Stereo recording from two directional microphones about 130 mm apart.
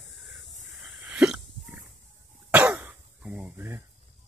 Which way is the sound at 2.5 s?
15° right (ahead or behind).